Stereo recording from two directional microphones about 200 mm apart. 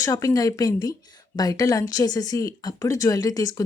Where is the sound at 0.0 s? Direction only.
15° left (ahead or behind).